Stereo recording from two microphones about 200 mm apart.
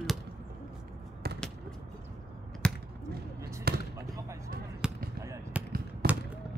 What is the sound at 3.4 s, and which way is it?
Basketball bounce, 15° right (ahead or behind).